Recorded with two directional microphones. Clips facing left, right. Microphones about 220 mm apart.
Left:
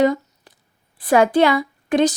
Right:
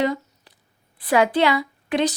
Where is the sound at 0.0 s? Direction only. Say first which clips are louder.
Left 6 dB; 45° left (ahead or behind).